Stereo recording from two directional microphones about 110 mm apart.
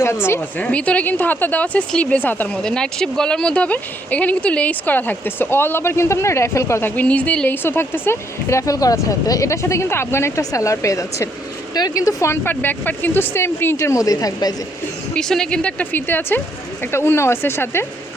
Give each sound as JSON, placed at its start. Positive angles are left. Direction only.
{"t": 0.0, "sound": "speech", "side_deg": 25}
{"t": 15.1, "sound": "a woman's voice", "side_deg": 5}